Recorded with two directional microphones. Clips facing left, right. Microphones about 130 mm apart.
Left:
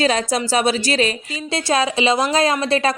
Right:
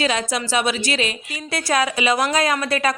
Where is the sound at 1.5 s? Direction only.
25° left (ahead or behind).